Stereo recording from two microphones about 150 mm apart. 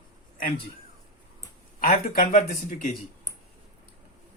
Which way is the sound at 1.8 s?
70° left (ahead or behind).